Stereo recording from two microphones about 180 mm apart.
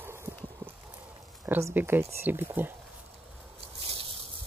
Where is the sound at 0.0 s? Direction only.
15° right (ahead or behind).